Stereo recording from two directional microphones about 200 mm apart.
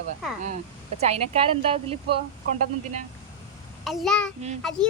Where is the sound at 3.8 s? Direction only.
Centre (ahead or behind).